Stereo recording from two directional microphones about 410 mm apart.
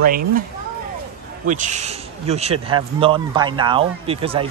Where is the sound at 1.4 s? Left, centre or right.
Centre.